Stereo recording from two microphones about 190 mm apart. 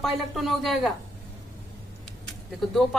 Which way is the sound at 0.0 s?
Centre (ahead or behind).